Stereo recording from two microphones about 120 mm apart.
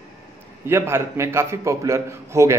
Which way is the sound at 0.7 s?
20° right (ahead or behind).